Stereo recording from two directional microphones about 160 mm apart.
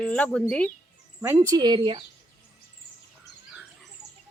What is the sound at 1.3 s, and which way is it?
Speech, 25° right (ahead or behind).